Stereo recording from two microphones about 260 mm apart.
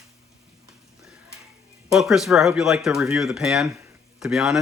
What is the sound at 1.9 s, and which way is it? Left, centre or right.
Speech, centre.